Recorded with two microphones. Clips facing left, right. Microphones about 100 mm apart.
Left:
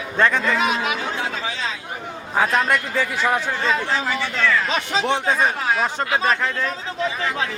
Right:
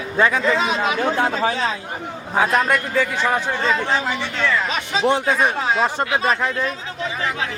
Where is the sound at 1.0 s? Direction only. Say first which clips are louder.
Right 7 dB; 50° right (ahead or behind).